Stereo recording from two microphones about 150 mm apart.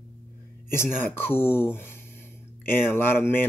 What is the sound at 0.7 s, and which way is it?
Speech, 15° left (ahead or behind).